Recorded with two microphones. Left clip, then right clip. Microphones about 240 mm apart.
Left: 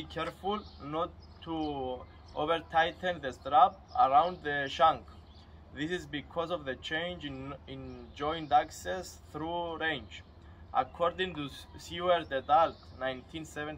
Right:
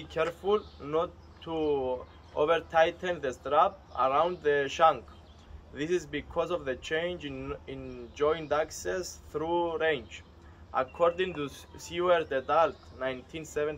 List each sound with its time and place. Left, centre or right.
0.2 s speech: right